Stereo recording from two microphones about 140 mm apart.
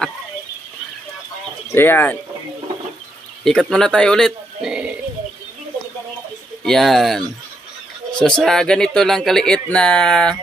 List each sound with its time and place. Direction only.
1.7 s speech: 15° left (ahead or behind)
3.4 s speech: 5° left (ahead or behind)
6.6 s speech: centre (ahead or behind)